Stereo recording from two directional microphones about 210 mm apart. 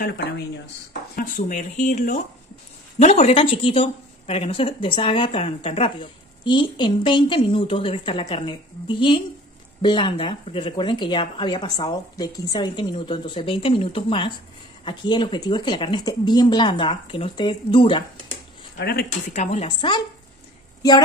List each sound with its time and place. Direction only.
1.1 s a woman's voice: 35° left (ahead or behind)
18.8 s speech: 50° left (ahead or behind)
19.0 s speech: 35° left (ahead or behind)